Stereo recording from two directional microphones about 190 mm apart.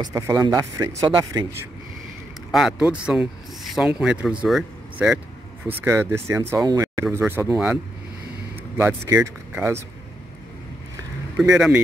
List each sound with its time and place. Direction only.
0.0 s speech: 15° right (ahead or behind)
2.5 s speech: 5° right (ahead or behind)
11.3 s speech: 5° right (ahead or behind)